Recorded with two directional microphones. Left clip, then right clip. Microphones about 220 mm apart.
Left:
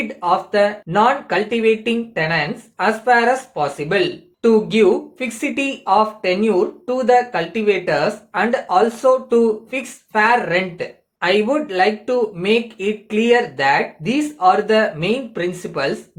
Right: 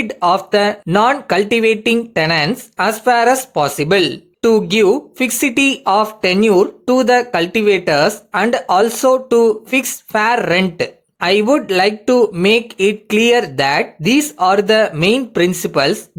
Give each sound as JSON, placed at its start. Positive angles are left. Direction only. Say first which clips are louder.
{"t": 0.1, "sound": "speech", "louder": "right 5 dB", "side_deg": -50}